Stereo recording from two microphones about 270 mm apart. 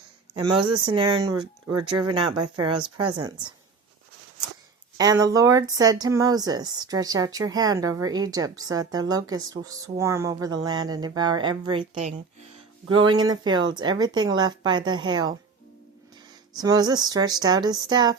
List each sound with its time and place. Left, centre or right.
0.3 s a woman's voice: centre
4.9 s speech: centre
13.1 s speech: centre
16.6 s speech: centre